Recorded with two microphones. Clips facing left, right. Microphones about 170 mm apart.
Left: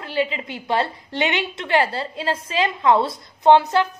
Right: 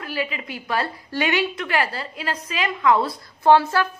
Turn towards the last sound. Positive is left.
turn(degrees=20)  # may be behind; listen again after turning